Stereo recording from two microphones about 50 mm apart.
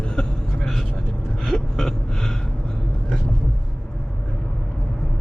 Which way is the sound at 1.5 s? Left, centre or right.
Centre.